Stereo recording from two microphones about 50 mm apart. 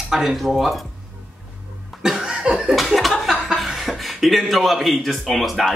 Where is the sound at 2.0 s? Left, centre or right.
Centre.